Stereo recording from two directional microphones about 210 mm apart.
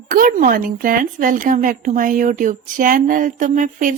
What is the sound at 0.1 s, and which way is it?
Speech, 40° right (ahead or behind).